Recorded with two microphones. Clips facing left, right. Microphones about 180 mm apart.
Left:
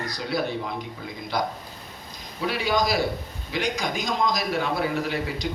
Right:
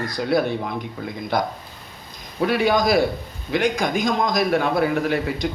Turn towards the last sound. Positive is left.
turn(degrees=-55)  # may be behind; listen again after turning